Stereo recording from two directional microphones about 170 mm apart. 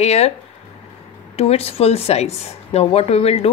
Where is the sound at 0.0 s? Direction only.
40° left (ahead or behind).